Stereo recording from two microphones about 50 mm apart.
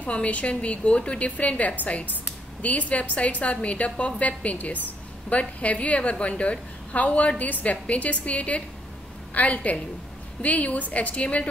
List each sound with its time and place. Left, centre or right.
0.0 s a woman's voice: left